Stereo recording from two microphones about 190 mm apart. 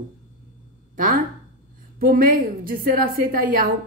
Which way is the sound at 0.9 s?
45° right (ahead or behind).